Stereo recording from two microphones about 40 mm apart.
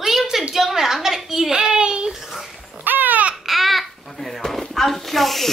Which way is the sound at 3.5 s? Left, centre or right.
Centre.